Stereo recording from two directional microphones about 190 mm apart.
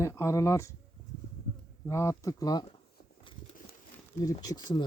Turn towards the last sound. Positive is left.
turn(degrees=20)  # may be behind; listen again after turning